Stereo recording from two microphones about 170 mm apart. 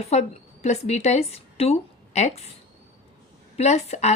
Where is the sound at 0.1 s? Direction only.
40° left (ahead or behind).